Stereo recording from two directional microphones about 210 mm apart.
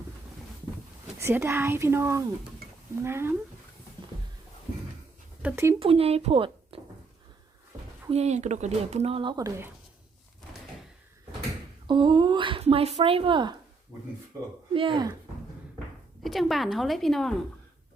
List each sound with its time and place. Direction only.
1.2 s speech: 10° right (ahead or behind)
5.4 s speech: 10° right (ahead or behind)
5.8 s speech: 25° right (ahead or behind)
8.1 s speech: 30° right (ahead or behind); by 9.7 s 15° right (ahead or behind)
11.9 s speech: 20° right (ahead or behind)
14.7 s speech: 25° right (ahead or behind)
16.2 s a woman's voice: centre (ahead or behind)